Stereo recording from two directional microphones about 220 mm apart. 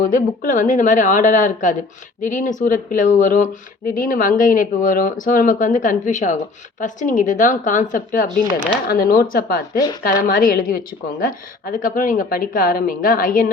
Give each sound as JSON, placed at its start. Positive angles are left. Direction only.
{"t": 0.0, "sound": "speech", "side_deg": 35}